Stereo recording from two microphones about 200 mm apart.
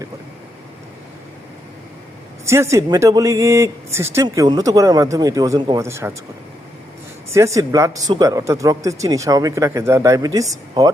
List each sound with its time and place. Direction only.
2.5 s speech: 15° right (ahead or behind)
7.3 s speech: 15° right (ahead or behind)